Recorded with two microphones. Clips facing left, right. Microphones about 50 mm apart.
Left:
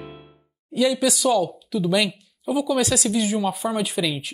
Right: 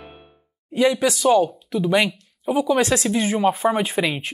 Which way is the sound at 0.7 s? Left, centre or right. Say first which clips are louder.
Right 2 dB; right.